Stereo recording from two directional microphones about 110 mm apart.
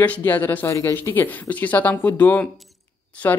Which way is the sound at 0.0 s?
15° left (ahead or behind).